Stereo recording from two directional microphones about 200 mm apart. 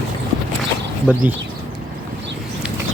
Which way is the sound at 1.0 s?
10° right (ahead or behind).